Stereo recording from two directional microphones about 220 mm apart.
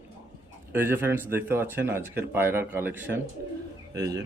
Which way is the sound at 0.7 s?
10° right (ahead or behind).